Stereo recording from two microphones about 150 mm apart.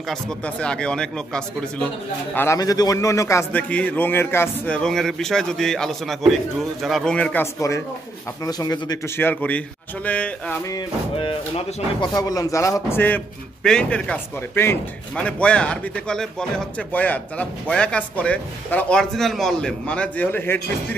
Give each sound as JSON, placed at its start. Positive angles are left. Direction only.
{"t": 0.1, "sound": "speech", "side_deg": 5}
{"t": 2.3, "sound": "speech", "side_deg": 20}
{"t": 8.5, "sound": "speech", "side_deg": 25}
{"t": 11.1, "sound": "speech", "side_deg": 35}